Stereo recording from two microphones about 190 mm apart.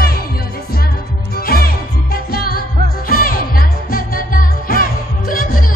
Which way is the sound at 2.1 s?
50° left (ahead or behind).